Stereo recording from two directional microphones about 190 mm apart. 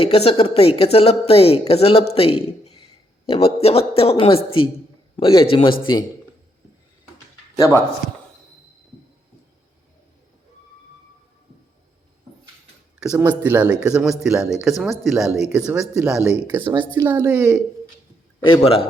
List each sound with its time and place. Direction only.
0.0 s a man's voice: 30° left (ahead or behind)
13.1 s speech: 10° right (ahead or behind)
18.4 s a man's voice: 30° left (ahead or behind)